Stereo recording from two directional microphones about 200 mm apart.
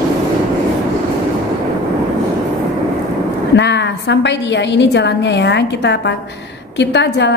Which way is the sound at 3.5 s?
60° left (ahead or behind).